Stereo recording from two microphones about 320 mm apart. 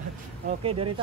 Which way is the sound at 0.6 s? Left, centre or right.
Centre.